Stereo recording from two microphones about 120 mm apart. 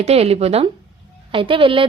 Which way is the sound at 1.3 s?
45° right (ahead or behind).